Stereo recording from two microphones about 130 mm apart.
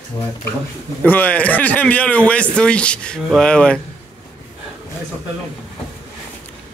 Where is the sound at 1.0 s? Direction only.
10° left (ahead or behind).